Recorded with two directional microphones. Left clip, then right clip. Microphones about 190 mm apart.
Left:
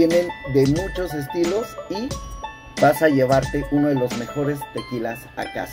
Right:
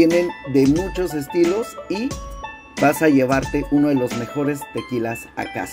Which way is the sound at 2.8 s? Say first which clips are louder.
Even; 35° right (ahead or behind).